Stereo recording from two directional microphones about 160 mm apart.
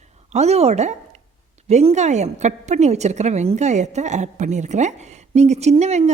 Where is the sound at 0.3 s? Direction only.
45° right (ahead or behind).